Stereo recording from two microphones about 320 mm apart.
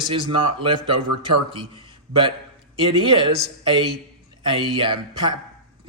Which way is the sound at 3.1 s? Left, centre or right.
Centre.